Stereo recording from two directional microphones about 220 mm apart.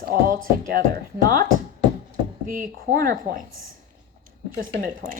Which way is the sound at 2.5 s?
40° right (ahead or behind).